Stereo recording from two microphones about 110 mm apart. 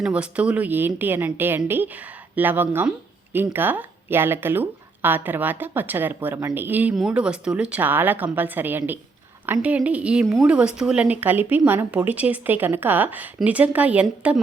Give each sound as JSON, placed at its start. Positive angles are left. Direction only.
{"t": 0.0, "sound": "speech", "side_deg": -10}